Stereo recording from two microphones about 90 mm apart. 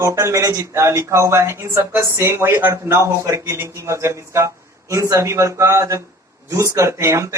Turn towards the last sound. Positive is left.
turn(degrees=-35)  # may be behind; listen again after turning